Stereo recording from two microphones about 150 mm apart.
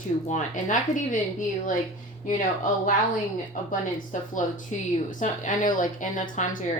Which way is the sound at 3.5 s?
60° left (ahead or behind).